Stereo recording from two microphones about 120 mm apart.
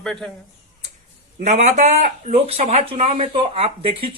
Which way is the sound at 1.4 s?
75° right (ahead or behind).